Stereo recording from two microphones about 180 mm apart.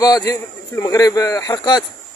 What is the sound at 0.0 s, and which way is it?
Speech, 20° left (ahead or behind).